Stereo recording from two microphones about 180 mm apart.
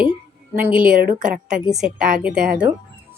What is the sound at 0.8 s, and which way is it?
Speech, 50° right (ahead or behind).